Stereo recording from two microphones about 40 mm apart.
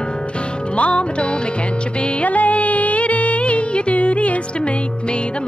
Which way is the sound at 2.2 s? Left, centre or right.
Left.